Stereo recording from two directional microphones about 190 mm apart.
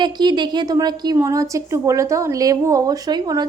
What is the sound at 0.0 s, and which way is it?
A woman's voice, 25° right (ahead or behind).